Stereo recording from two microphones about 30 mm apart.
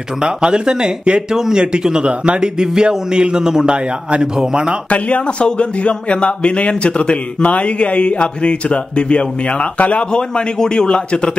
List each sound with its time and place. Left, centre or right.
0.2 s a man's voice: right
1.3 s a man's voice: centre; by 2.5 s right
2.6 s a man's voice: centre
4.8 s a man's voice: left
10.1 s a man's voice: left